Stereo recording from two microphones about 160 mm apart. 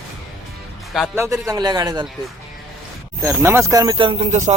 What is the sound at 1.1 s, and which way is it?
Speech, 20° right (ahead or behind).